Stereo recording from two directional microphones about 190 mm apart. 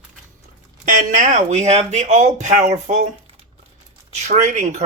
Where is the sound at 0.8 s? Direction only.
45° right (ahead or behind).